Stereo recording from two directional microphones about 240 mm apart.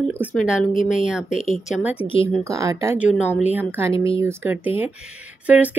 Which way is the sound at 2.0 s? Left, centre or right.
Left.